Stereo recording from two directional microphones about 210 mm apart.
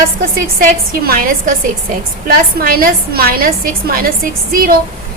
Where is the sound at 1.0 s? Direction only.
45° right (ahead or behind).